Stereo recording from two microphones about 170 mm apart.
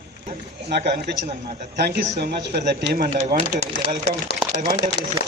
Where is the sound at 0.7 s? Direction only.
80° right.